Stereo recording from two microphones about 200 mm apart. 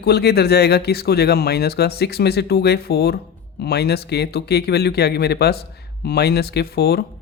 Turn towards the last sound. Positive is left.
turn(degrees=50)  # may be behind; listen again after turning